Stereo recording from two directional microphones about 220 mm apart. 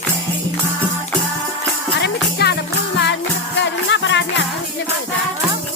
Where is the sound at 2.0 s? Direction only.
50° left (ahead or behind).